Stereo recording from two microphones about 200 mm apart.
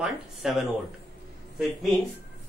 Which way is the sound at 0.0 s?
Centre (ahead or behind).